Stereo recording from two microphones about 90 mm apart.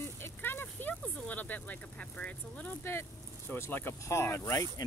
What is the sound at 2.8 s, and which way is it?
Speech, 25° left (ahead or behind).